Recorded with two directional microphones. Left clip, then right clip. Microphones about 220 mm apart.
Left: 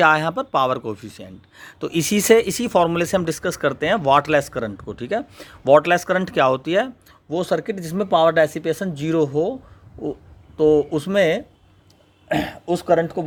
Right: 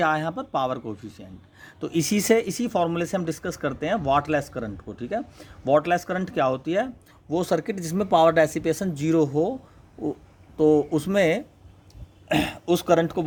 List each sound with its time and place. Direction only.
0.0 s speech: 25° left (ahead or behind)
7.3 s speech: 5° left (ahead or behind)
10.6 s speech: 10° left (ahead or behind)